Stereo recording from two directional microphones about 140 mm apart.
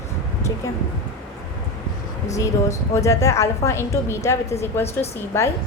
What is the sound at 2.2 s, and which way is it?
A woman's voice, 20° left (ahead or behind).